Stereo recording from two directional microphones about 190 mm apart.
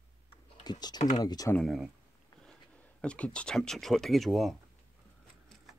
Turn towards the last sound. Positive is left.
turn(degrees=0)  # may be behind; listen again after turning